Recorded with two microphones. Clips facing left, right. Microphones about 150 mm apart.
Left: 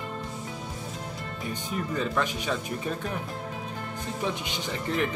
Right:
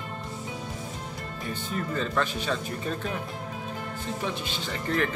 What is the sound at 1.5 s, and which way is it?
Music, 15° left (ahead or behind).